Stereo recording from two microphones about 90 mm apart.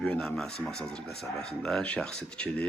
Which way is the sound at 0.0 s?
10° left (ahead or behind).